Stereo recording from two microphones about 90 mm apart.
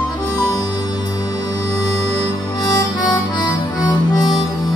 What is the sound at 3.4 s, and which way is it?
Music, 50° left (ahead or behind).